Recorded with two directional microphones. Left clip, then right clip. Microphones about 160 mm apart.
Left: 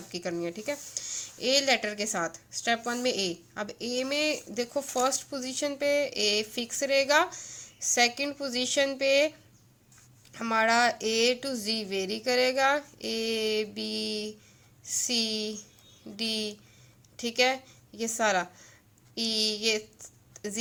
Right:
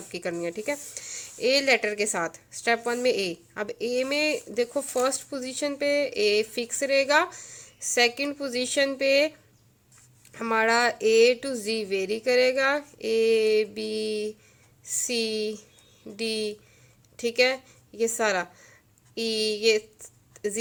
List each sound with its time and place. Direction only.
0.1 s a woman's voice: 30° right (ahead or behind)
10.3 s speech: 30° right (ahead or behind)
14.8 s a woman's voice: 30° right (ahead or behind)
20.3 s a sound: 30° right (ahead or behind)